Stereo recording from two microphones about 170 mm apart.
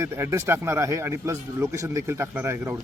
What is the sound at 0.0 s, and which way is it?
A man's voice, 15° right (ahead or behind).